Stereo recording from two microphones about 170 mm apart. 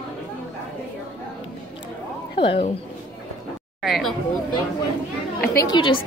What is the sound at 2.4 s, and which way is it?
Speech, 30° left (ahead or behind).